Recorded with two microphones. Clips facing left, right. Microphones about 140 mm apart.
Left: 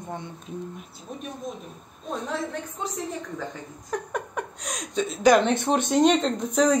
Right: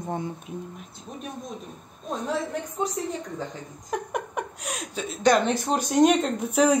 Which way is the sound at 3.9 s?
10° right (ahead or behind).